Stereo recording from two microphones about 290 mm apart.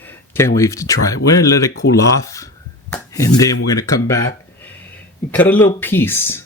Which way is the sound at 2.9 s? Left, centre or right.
Centre.